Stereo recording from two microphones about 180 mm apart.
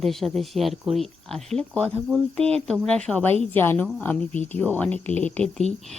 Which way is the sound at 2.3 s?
35° right (ahead or behind).